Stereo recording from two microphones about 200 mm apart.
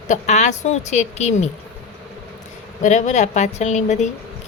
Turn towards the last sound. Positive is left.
turn(degrees=35)  # may be behind; listen again after turning